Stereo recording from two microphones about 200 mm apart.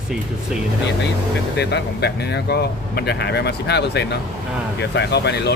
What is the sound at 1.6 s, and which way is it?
Speech, 55° left (ahead or behind).